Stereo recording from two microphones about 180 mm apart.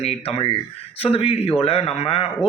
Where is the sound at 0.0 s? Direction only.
35° left (ahead or behind).